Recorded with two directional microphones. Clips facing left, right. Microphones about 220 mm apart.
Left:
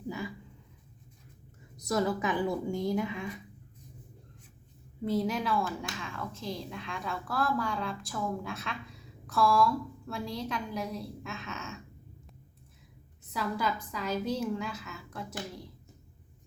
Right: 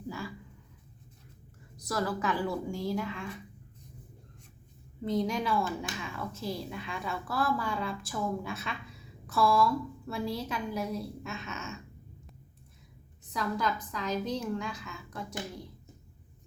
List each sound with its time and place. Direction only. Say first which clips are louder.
1.8 s a woman's voice: left 3 dB; 20° left (ahead or behind)
5.0 s a woman's voice: even; 5° left (ahead or behind)
13.3 s a woman's voice: even; 5° left (ahead or behind)